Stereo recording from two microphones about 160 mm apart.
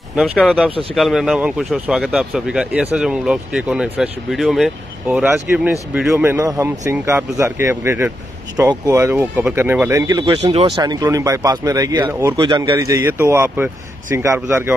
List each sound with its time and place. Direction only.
0.1 s speech: centre (ahead or behind); by 10.7 s 35° right (ahead or behind)
10.8 s speech: 25° right (ahead or behind)
12.4 s speech: 25° right (ahead or behind)